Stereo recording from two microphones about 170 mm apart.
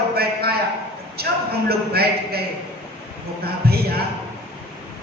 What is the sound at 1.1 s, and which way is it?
A man's voice, 65° right (ahead or behind).